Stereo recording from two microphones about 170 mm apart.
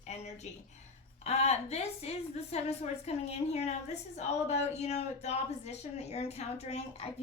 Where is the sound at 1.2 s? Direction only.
40° left (ahead or behind).